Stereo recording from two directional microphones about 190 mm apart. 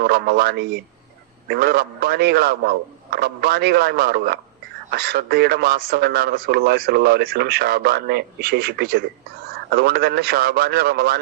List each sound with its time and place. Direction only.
0.0 s a man's voice: 55° right (ahead or behind)